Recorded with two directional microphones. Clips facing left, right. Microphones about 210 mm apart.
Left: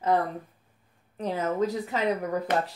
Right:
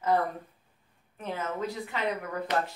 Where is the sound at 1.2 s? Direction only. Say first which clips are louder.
Left 6 dB; 40° left (ahead or behind).